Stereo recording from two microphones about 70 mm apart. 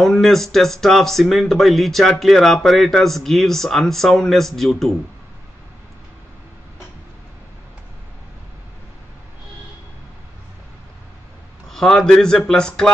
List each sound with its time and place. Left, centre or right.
0.0 s speech: centre
11.7 s speech: centre